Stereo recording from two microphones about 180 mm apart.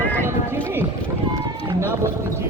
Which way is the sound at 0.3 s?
10° right (ahead or behind).